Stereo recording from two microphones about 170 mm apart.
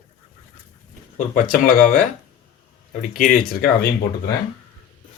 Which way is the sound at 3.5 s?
60° left (ahead or behind).